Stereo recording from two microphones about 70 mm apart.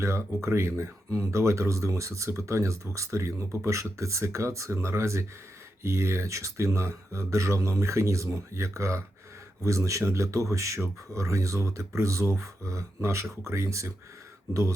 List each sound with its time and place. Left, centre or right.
0.4 s speech: right